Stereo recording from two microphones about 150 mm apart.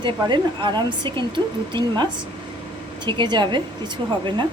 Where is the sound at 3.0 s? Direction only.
30° right (ahead or behind).